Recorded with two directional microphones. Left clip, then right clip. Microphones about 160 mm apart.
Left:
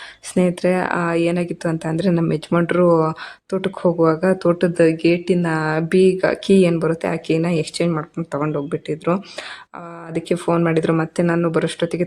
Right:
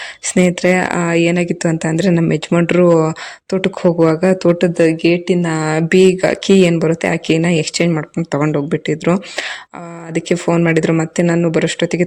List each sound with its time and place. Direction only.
0.3 s speech: 35° right (ahead or behind)